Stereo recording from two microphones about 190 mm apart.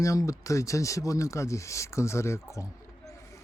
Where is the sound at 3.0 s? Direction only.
15° left (ahead or behind).